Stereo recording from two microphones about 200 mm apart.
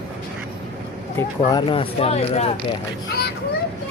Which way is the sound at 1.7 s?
30° left (ahead or behind).